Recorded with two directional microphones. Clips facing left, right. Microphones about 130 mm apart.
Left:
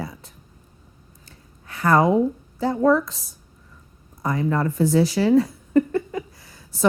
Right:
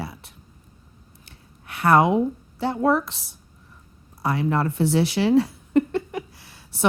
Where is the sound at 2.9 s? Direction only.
65° right (ahead or behind).